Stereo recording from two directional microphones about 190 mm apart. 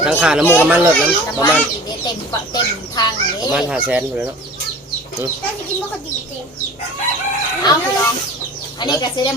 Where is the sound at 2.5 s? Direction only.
20° left (ahead or behind).